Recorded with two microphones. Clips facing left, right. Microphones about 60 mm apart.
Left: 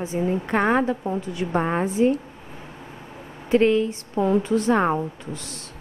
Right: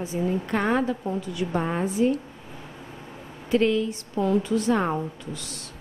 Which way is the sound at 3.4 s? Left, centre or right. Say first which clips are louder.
Left 4 dB; left.